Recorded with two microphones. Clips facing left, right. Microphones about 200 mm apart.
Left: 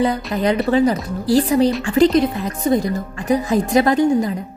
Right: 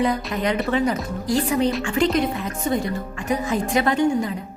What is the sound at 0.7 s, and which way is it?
A woman's voice, 35° left (ahead or behind).